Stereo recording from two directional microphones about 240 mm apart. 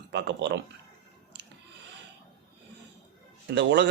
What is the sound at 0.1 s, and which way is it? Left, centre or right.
Speech, right.